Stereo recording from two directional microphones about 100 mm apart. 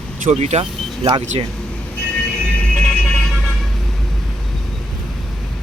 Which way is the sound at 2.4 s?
10° left (ahead or behind).